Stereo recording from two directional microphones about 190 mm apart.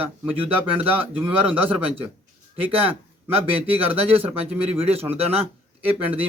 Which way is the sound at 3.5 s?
10° right (ahead or behind).